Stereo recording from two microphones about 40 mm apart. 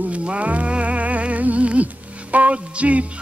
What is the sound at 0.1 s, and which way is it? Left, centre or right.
Music, right.